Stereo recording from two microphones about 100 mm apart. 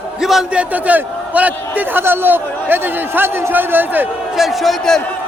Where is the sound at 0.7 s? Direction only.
15° right (ahead or behind).